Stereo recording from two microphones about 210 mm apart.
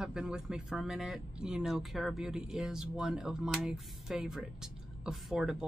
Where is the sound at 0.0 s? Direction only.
5° right (ahead or behind).